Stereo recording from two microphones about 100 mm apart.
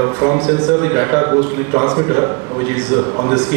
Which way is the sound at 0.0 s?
30° right (ahead or behind).